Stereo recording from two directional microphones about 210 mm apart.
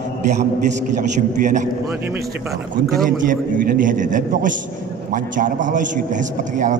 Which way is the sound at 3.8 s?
40° right (ahead or behind).